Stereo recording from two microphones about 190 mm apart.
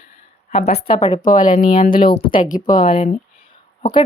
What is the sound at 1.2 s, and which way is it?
Speech, 45° left (ahead or behind).